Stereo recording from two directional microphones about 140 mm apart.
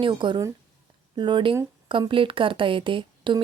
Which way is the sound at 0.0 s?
35° right (ahead or behind).